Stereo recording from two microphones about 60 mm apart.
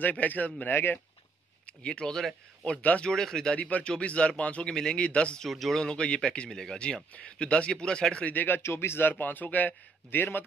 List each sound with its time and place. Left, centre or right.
0.0 s a man's voice: left
1.7 s a man's voice: centre
3.1 s speech: centre
3.5 s a man's voice: left
5.5 s speech: centre
8.3 s a man's voice: left
8.6 s speech: left
9.1 s a man's voice: left